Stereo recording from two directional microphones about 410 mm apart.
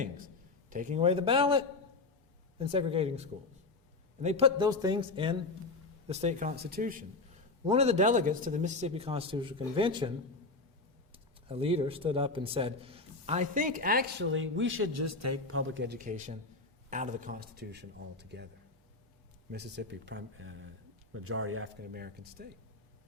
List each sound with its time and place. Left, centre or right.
0.7 s a man's voice: centre
11.1 s a man's voice: centre
19.5 s a man's voice: right